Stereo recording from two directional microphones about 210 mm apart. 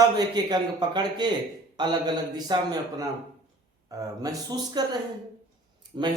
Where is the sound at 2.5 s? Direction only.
20° right (ahead or behind).